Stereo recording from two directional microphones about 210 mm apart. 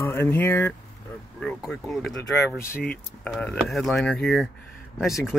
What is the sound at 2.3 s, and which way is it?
Speech, 15° left (ahead or behind).